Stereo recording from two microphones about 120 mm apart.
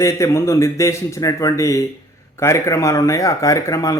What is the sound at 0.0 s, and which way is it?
Speech, 25° left (ahead or behind).